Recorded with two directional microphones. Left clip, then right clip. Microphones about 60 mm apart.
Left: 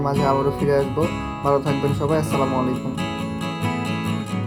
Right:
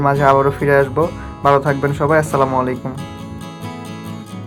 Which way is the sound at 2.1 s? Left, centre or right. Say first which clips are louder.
Right 8 dB; right.